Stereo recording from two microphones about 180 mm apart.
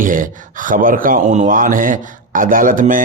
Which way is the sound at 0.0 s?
50° right (ahead or behind).